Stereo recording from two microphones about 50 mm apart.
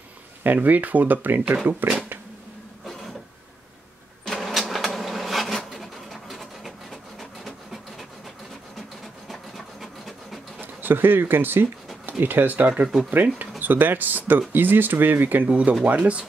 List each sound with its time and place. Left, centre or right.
0.4 s speech: right
4.2 s printer: centre
9.3 s a sound: centre
10.6 s speech: right
15.4 s speech: right